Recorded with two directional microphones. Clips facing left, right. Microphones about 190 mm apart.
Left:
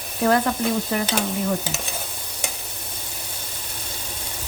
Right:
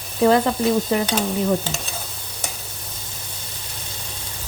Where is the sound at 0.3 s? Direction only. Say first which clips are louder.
Right 3 dB; 20° right (ahead or behind).